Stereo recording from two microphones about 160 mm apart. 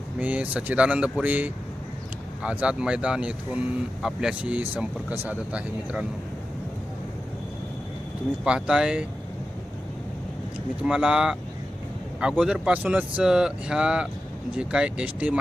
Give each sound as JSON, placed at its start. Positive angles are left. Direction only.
{"t": 0.2, "sound": "speech", "side_deg": -10}
{"t": 8.4, "sound": "speech", "side_deg": -5}
{"t": 10.8, "sound": "speech", "side_deg": -5}